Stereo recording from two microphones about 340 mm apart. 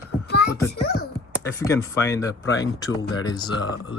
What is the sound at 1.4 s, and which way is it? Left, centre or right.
Speech, centre.